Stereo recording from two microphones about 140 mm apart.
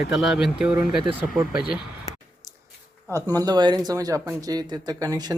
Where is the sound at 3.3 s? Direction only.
30° right (ahead or behind).